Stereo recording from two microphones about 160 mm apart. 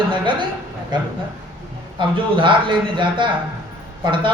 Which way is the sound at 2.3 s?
30° right (ahead or behind).